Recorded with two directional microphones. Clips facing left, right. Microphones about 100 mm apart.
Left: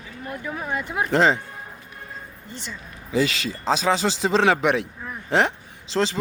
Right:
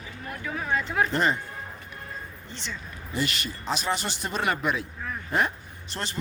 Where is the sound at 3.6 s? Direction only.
90° left.